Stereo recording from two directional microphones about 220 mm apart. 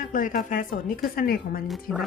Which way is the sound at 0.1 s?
40° left (ahead or behind).